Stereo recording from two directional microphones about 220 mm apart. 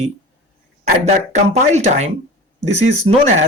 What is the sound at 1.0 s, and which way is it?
Speech, 30° right (ahead or behind).